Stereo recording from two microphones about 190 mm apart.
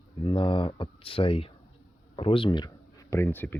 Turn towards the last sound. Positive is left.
turn(degrees=10)  # may be behind; listen again after turning